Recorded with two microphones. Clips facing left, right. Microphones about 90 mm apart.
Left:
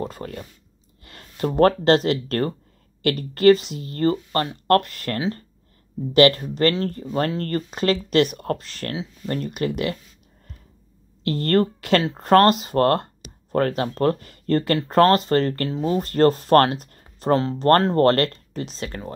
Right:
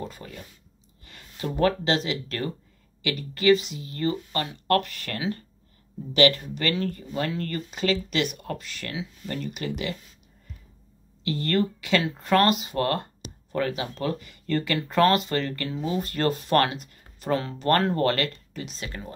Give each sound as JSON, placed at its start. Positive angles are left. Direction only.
{"t": 0.0, "sound": "speech", "side_deg": 45}
{"t": 11.2, "sound": "speech", "side_deg": 45}
{"t": 17.9, "sound": "speech", "side_deg": 45}